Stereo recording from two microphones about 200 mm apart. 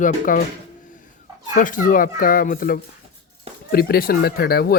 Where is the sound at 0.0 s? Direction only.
40° left (ahead or behind).